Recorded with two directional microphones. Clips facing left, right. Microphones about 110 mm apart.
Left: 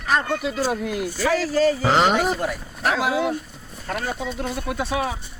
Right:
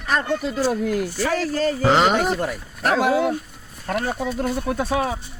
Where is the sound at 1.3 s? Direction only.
45° right (ahead or behind).